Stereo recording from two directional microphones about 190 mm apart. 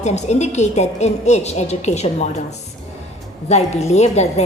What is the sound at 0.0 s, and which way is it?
A woman's voice, 35° left (ahead or behind).